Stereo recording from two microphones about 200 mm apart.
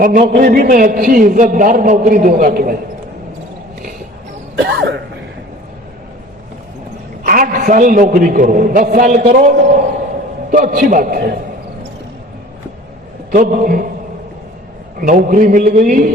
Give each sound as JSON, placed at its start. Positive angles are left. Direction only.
{"t": 0.0, "sound": "a man's voice", "side_deg": -40}
{"t": 4.7, "sound": "speech", "side_deg": -55}
{"t": 7.3, "sound": "a man's voice", "side_deg": -45}
{"t": 13.3, "sound": "a man's voice", "side_deg": -45}
{"t": 15.0, "sound": "a man's voice", "side_deg": -40}